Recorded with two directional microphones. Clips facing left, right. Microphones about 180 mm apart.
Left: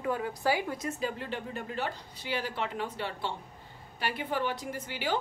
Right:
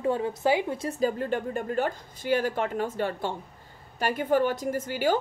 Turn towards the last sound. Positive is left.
turn(degrees=-45)  # may be behind; listen again after turning